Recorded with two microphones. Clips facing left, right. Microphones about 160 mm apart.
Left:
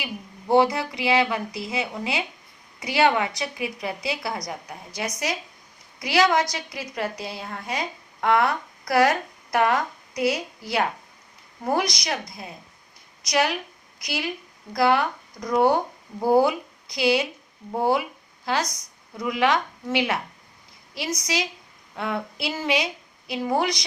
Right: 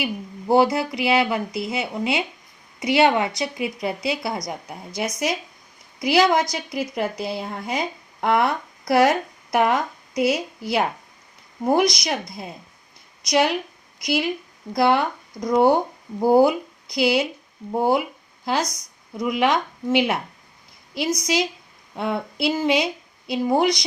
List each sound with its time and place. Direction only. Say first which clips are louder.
0.5 s a woman's voice: right 2 dB; 30° right (ahead or behind)